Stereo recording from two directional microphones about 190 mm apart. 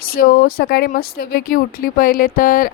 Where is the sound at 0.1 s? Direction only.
50° left (ahead or behind).